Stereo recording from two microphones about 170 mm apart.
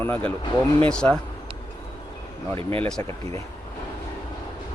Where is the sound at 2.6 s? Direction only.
35° right (ahead or behind).